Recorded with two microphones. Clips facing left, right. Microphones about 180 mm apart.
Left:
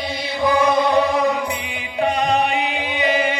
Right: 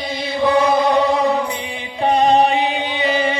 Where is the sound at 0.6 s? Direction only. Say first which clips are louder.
Right 1 dB; 30° right (ahead or behind).